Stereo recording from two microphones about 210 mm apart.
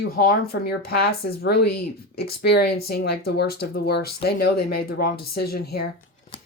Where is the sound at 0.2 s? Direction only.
45° left (ahead or behind).